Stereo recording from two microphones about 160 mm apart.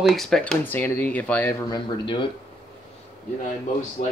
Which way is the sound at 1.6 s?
30° left (ahead or behind).